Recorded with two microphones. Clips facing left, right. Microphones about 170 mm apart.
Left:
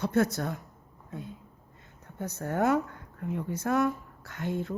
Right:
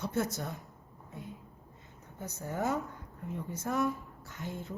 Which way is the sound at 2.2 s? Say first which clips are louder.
Left 6 dB; 65° left (ahead or behind).